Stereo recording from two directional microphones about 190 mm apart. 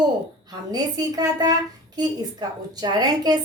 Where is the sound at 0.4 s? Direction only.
20° right (ahead or behind).